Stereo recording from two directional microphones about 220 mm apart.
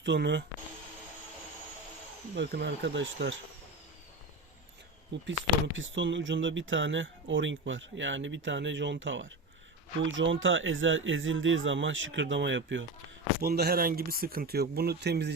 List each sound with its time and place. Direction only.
0.0 s speech: 50° right (ahead or behind)
2.3 s speech: 50° right (ahead or behind)
5.1 s speech: 55° right (ahead or behind)
13.4 s speech: 45° right (ahead or behind)